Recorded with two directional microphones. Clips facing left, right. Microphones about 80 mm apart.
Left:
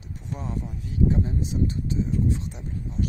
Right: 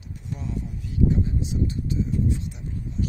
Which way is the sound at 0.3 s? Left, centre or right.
Left.